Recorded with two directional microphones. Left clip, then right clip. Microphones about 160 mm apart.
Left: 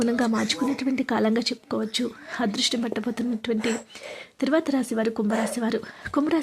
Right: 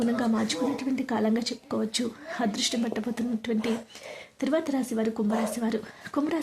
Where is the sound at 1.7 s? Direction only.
15° left (ahead or behind).